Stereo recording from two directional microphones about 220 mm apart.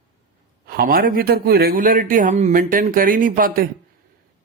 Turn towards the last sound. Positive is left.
turn(degrees=-40)  # may be behind; listen again after turning